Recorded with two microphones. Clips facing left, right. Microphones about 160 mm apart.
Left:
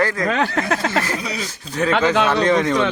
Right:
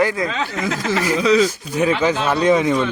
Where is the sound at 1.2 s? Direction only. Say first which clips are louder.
Right 13 dB; 90° right.